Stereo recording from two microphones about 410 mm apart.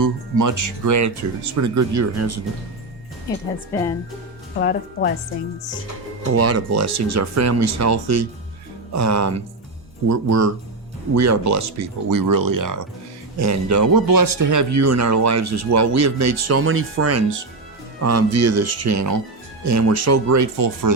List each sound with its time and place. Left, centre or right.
0.0 s speech: right
4.5 s speech: left
6.3 s speech: right